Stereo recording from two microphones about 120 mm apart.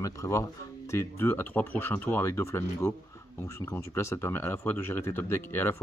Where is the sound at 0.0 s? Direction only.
25° left (ahead or behind).